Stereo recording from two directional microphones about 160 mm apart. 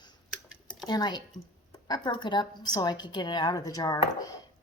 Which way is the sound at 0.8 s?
25° left (ahead or behind).